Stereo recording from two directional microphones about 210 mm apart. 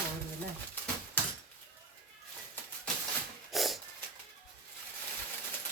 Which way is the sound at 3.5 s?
Centre (ahead or behind).